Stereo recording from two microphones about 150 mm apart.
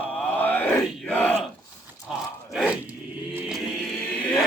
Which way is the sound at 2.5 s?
5° right (ahead or behind).